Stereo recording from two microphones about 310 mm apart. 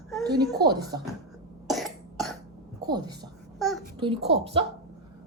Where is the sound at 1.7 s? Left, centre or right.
Centre.